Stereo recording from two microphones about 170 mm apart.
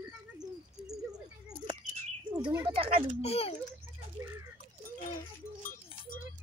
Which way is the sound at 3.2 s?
35° left (ahead or behind).